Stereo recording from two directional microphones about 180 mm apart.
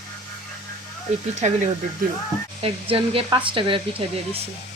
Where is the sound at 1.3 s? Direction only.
40° right (ahead or behind).